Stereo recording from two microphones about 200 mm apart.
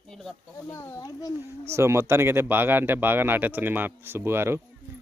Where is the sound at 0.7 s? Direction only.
15° left (ahead or behind).